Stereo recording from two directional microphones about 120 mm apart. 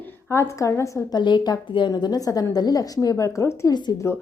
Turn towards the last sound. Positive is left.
turn(degrees=35)  # may be behind; listen again after turning